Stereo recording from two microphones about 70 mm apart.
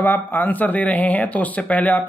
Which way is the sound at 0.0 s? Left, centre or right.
Left.